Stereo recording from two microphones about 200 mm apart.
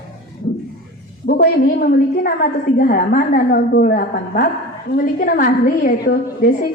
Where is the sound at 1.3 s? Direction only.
50° left (ahead or behind).